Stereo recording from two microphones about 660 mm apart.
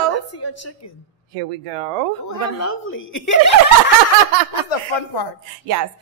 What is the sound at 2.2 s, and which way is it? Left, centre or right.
A woman's voice, left.